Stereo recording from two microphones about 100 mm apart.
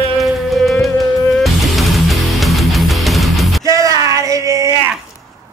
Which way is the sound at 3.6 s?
35° right (ahead or behind).